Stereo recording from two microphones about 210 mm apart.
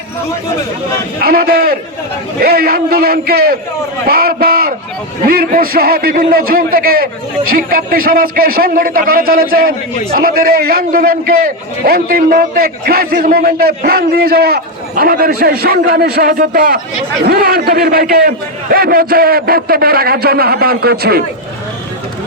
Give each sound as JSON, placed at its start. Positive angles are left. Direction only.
{"t": 1.2, "sound": "a man's voice", "side_deg": -45}